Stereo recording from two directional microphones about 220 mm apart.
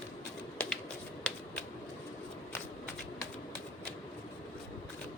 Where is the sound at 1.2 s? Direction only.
5° left (ahead or behind).